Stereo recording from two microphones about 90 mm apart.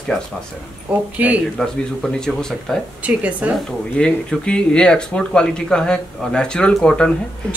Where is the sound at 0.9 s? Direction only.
15° right (ahead or behind).